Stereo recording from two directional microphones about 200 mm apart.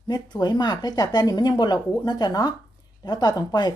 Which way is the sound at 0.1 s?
20° left (ahead or behind).